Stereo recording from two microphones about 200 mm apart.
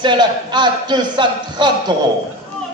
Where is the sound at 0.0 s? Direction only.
20° right (ahead or behind).